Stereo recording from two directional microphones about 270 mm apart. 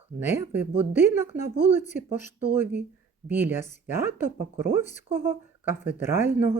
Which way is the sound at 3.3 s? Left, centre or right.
Centre.